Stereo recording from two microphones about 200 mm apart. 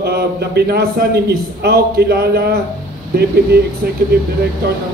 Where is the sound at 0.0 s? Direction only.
55° right (ahead or behind).